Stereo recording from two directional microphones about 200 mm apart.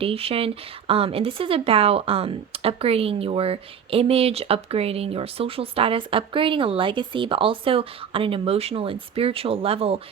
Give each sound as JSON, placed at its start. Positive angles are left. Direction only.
{"t": 0.0, "sound": "speech", "side_deg": -30}